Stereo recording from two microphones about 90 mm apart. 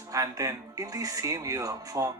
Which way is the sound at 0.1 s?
40° right (ahead or behind).